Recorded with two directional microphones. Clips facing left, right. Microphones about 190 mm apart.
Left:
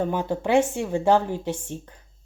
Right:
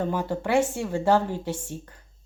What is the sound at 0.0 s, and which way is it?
A woman's voice, 15° left (ahead or behind).